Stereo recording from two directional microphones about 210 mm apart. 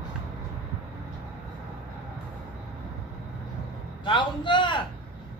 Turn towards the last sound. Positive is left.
turn(degrees=25)  # may be behind; listen again after turning